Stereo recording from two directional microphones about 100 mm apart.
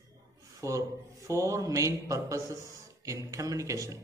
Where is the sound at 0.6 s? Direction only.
30° right (ahead or behind).